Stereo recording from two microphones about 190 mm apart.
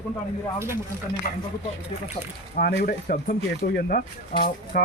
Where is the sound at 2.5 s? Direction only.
50° left (ahead or behind).